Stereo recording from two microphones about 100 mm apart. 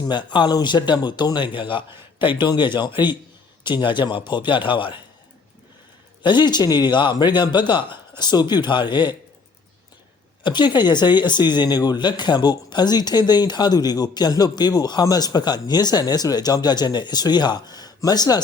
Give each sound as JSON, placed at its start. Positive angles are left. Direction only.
{"t": 0.1, "sound": "speech", "side_deg": 50}
{"t": 6.2, "sound": "speech", "side_deg": 45}
{"t": 10.4, "sound": "speech", "side_deg": 50}